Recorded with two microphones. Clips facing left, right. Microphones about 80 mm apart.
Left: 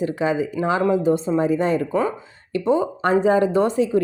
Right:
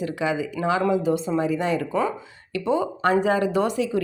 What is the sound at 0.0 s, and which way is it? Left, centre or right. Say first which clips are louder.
Speech: left 4 dB; left.